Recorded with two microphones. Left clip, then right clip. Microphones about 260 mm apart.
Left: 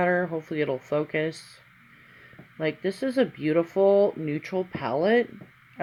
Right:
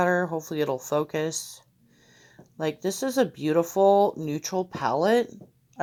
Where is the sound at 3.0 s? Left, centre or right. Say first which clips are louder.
Even; centre.